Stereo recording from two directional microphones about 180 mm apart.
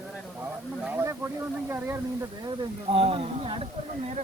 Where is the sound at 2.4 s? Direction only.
30° right (ahead or behind).